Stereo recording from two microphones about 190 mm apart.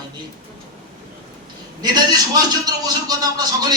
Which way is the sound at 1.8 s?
20° right (ahead or behind).